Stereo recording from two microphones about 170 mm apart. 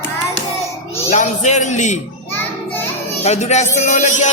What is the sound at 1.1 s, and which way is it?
Speech, 45° left (ahead or behind).